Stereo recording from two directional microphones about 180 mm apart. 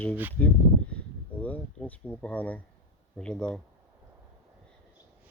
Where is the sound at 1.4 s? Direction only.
10° left (ahead or behind).